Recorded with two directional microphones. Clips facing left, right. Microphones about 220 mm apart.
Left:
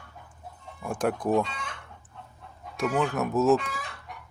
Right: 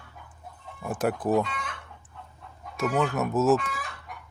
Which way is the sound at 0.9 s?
5° right (ahead or behind).